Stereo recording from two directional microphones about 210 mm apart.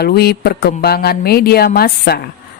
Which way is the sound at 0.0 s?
50° left (ahead or behind).